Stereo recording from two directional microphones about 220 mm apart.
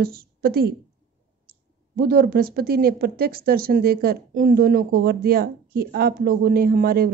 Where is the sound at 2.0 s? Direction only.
45° right (ahead or behind).